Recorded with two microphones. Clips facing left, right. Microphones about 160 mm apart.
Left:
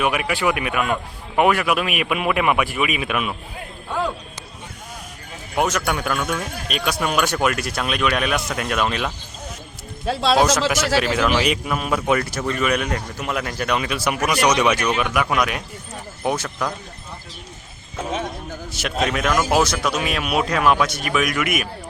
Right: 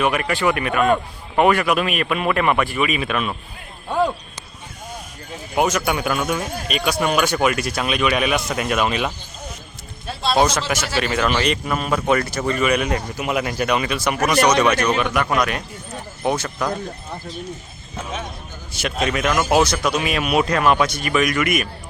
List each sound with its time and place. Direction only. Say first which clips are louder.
0.0 s speech: right 1 dB; 5° left (ahead or behind)
5.5 s speech: right 2 dB; centre (ahead or behind)
10.1 s speech: left 4 dB; 90° left
10.3 s speech: even; 5° left (ahead or behind)
18.7 s speech: right 1 dB; centre (ahead or behind)